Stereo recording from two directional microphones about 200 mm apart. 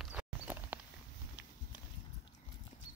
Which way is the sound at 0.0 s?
10° right (ahead or behind).